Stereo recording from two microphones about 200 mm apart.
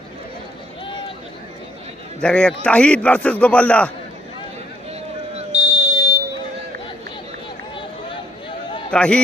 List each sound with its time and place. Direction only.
2.2 s a man's voice: 5° left (ahead or behind)
4.9 s a sound: 30° right (ahead or behind)
8.9 s speech: 5° left (ahead or behind)